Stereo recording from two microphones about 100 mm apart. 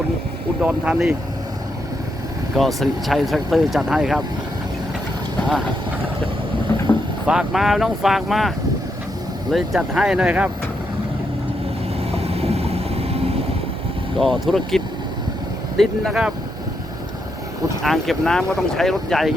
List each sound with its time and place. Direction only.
0.6 s speech: 10° right (ahead or behind)
2.6 s speech: centre (ahead or behind)
7.3 s speech: 5° right (ahead or behind)
11.9 s vehicle: 80° right
14.2 s speech: 5° left (ahead or behind)
15.8 s speech: centre (ahead or behind)
17.8 s speech: centre (ahead or behind)